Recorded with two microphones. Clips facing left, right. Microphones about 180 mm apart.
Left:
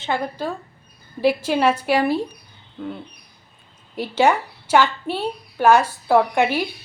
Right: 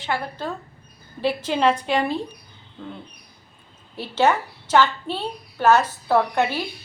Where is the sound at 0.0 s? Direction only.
20° left (ahead or behind).